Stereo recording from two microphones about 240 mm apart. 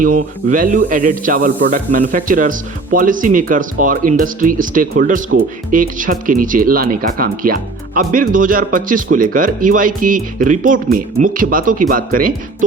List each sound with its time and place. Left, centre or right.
0.0 s speech: right